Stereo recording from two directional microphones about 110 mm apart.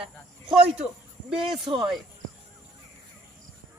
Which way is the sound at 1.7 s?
50° right (ahead or behind).